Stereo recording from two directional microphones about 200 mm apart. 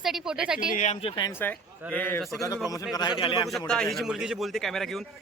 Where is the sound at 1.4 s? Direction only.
10° left (ahead or behind).